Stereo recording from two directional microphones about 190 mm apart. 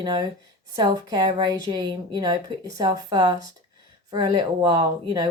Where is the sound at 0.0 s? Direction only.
20° right (ahead or behind).